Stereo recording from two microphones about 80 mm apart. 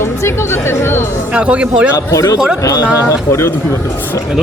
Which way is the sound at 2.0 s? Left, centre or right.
Left.